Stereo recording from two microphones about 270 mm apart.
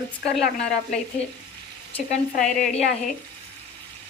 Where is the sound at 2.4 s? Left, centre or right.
Centre.